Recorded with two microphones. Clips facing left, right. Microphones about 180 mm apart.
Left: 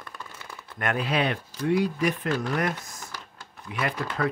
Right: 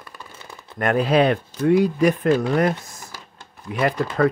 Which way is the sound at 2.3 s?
30° right (ahead or behind).